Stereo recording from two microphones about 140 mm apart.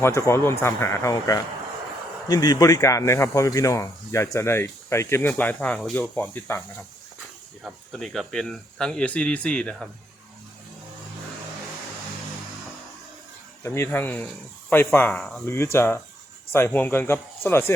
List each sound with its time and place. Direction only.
0.0 s speech: 20° left (ahead or behind)
7.6 s speech: centre (ahead or behind)
13.6 s speech: 20° left (ahead or behind)
15.4 s speech: 20° left (ahead or behind)